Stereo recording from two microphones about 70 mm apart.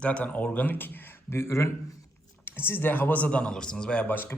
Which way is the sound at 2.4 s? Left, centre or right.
Left.